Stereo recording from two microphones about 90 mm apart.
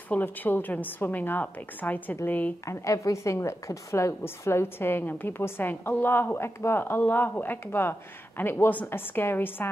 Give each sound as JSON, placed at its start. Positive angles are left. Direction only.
{"t": 0.1, "sound": "a woman's voice", "side_deg": 20}
{"t": 2.6, "sound": "a woman's voice", "side_deg": 35}